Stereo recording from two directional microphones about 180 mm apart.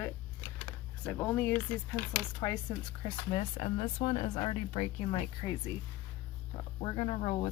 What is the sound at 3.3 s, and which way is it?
Speech, 35° left (ahead or behind).